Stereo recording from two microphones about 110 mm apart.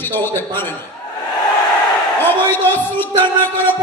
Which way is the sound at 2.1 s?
20° left (ahead or behind).